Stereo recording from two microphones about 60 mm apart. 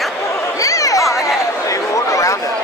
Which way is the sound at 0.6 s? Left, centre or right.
Left.